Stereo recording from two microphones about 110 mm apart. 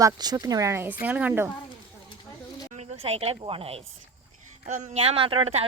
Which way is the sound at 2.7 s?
70° right (ahead or behind).